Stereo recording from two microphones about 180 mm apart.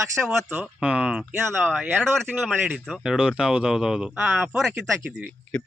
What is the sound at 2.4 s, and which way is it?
Speech, centre (ahead or behind).